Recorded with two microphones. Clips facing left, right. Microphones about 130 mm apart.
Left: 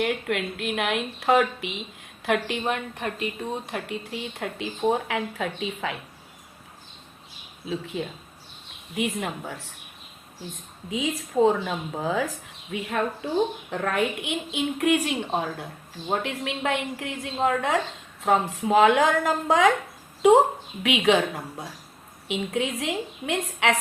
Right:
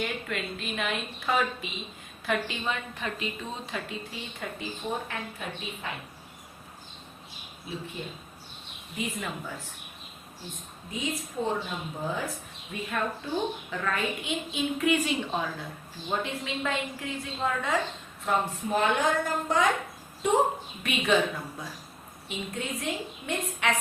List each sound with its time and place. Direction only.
0.0 s a woman's voice: 65° left (ahead or behind); by 6.0 s 90° left
9.0 s a woman's voice: 75° left (ahead or behind)
9.5 s a woman's voice: 85° left
10.8 s a woman's voice: 90° left
13.7 s a woman's voice: 65° left (ahead or behind)
18.3 s a woman's voice: 90° left